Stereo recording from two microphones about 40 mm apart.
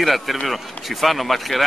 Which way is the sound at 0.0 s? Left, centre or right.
Centre.